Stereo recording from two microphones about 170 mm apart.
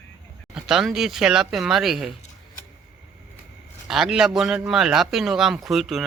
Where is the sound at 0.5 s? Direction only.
5° right (ahead or behind).